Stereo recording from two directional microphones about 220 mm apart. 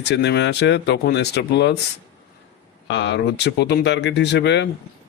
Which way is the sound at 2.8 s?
55° left (ahead or behind).